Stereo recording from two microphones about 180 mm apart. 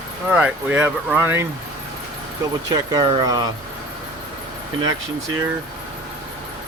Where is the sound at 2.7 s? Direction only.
20° right (ahead or behind).